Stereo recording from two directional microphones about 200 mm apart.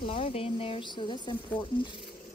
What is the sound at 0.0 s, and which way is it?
Speech, 30° left (ahead or behind).